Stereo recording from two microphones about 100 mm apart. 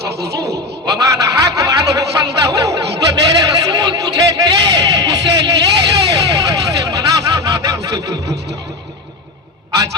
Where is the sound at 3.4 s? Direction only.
35° right (ahead or behind).